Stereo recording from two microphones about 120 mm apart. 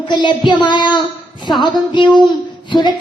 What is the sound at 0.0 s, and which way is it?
A woman's voice, 40° left (ahead or behind).